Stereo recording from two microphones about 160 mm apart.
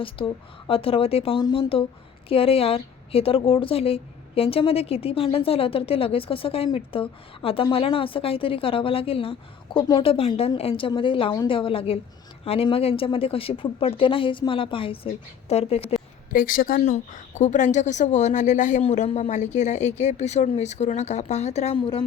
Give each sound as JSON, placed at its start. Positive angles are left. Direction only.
{"t": 0.2, "sound": "a woman's voice", "side_deg": 35}
{"t": 16.3, "sound": "a woman's voice", "side_deg": 60}
{"t": 16.8, "sound": "a woman's voice", "side_deg": 50}